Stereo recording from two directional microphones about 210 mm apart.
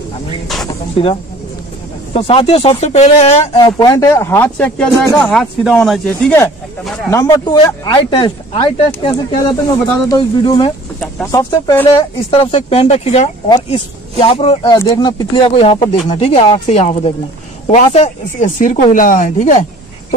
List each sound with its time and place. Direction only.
2.1 s speech: 25° left (ahead or behind)
3.5 s speech: 20° left (ahead or behind); by 7.1 s centre (ahead or behind)
7.1 s speech: 15° left (ahead or behind)
11.7 s speech: 10° left (ahead or behind)
12.3 s speech: 25° left (ahead or behind)